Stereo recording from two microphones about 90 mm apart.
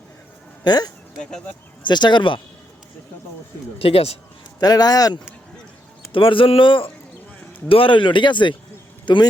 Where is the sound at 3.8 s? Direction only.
90° left.